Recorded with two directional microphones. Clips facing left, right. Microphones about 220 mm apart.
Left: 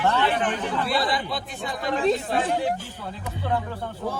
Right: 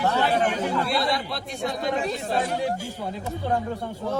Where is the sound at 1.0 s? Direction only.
Centre (ahead or behind).